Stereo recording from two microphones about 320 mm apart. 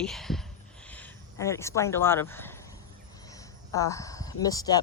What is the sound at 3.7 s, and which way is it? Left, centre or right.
Speech, centre.